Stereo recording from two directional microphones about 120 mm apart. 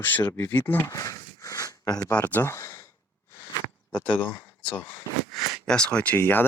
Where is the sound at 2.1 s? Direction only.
15° left (ahead or behind).